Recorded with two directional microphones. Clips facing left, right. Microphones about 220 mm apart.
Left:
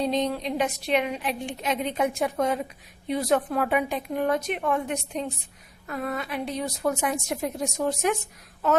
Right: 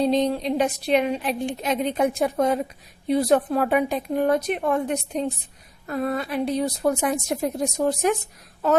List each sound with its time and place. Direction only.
0.0 s a woman's voice: 35° right (ahead or behind)